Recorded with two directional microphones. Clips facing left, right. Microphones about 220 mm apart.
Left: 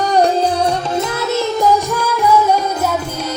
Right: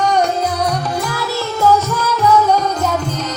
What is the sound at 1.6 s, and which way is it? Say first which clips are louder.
Music: even; 15° left (ahead or behind).